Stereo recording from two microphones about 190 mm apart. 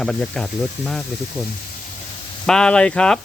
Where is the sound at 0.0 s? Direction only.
5° left (ahead or behind).